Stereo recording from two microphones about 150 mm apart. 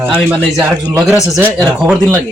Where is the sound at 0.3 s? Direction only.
5° right (ahead or behind).